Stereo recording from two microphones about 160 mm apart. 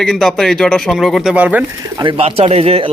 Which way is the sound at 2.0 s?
35° right (ahead or behind).